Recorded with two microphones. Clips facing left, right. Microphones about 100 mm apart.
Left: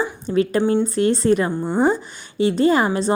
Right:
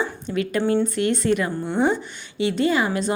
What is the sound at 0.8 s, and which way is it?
Speech, 35° left (ahead or behind).